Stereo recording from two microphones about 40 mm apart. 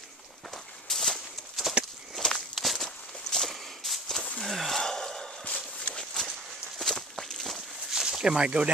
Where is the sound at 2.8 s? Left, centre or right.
Centre.